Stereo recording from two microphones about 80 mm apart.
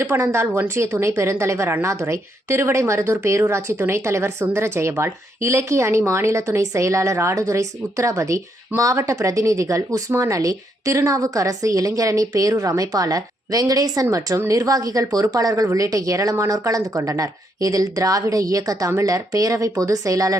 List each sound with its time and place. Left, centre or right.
0.0 s a woman's voice: right